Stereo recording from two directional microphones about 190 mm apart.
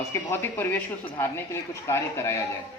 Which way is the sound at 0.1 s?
15° left (ahead or behind).